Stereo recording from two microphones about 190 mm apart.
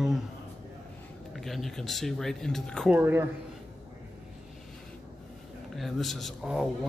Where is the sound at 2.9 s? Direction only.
10° right (ahead or behind).